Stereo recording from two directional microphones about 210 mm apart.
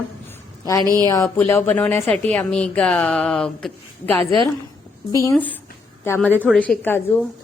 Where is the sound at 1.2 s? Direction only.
10° left (ahead or behind).